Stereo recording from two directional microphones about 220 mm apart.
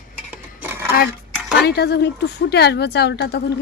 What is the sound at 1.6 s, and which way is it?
A woman's voice, 50° left (ahead or behind).